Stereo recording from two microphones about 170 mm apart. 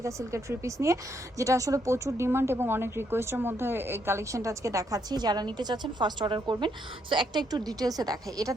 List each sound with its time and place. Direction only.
0.0 s a woman's voice: 15° right (ahead or behind)